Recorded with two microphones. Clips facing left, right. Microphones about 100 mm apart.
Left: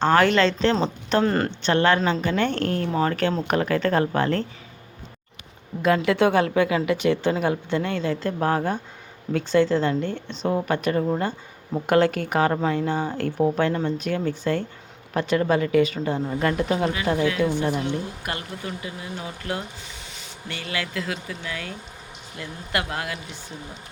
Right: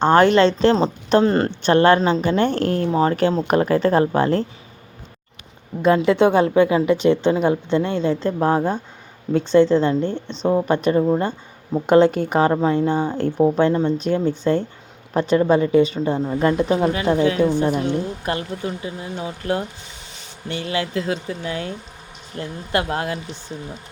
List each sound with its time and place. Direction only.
0.0 s a woman's voice: 30° right (ahead or behind)
5.8 s a woman's voice: 25° right (ahead or behind)